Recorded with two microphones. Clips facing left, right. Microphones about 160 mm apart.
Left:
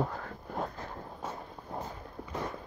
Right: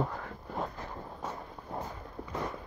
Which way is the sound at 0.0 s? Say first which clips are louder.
Even; 50° left (ahead or behind).